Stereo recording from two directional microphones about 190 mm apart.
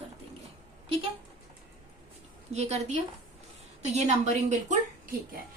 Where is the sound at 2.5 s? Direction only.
35° right (ahead or behind).